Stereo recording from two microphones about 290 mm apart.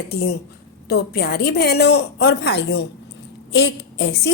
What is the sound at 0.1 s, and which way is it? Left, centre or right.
A woman's voice, left.